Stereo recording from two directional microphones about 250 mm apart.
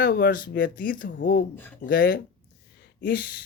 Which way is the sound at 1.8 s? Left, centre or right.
Left.